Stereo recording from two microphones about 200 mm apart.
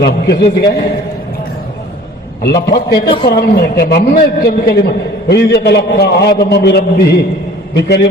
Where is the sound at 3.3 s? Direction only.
50° left (ahead or behind).